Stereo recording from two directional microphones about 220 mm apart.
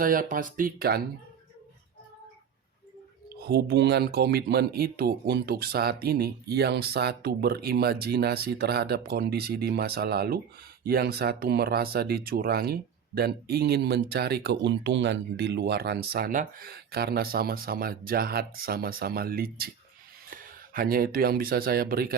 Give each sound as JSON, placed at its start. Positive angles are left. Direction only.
{"t": 0.0, "sound": "speech", "side_deg": -40}
{"t": 3.4, "sound": "speech", "side_deg": -45}